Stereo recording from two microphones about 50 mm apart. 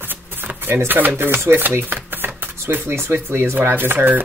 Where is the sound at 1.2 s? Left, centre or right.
Right.